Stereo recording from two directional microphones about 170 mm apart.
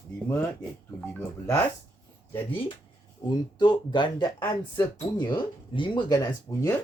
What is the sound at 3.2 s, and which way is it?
Speech, 25° left (ahead or behind).